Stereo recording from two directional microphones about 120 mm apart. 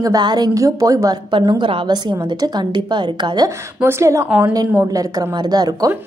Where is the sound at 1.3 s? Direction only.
40° right (ahead or behind).